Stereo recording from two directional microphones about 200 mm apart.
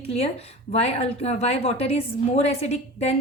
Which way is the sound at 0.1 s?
30° left (ahead or behind).